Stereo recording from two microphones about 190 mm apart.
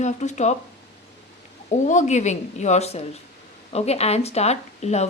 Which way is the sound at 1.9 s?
40° left (ahead or behind).